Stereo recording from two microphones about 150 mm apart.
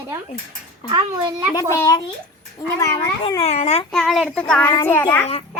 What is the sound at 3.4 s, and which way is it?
Speech, 45° left (ahead or behind).